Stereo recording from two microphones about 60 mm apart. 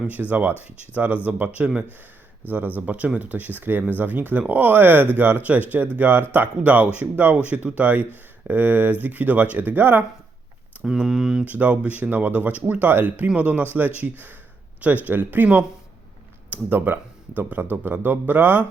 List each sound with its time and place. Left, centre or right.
0.3 s speech: right
2.7 s speech: right
10.8 s speech: centre
11.4 s speech: right